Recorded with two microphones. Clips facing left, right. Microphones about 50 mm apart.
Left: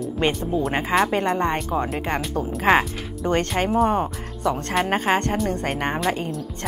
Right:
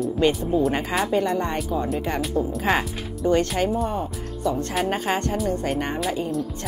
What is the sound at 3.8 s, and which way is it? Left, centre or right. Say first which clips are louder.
Speech: left 5 dB; left.